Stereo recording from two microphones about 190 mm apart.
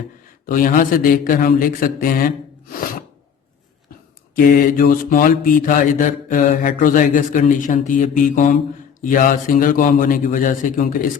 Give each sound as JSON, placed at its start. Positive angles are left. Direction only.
{"t": 0.4, "sound": "mantra", "side_deg": 45}
{"t": 4.4, "sound": "mantra", "side_deg": 50}